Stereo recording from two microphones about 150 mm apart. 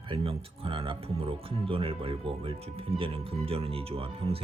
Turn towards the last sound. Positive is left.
turn(degrees=-40)  # may be behind; listen again after turning